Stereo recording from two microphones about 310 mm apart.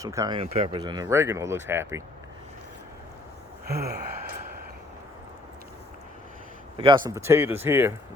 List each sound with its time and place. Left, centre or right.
0.0 s speech: centre
3.7 s gasp: right
6.7 s speech: centre